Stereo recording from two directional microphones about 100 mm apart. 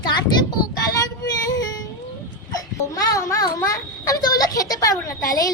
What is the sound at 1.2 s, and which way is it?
Female singing, 40° left (ahead or behind).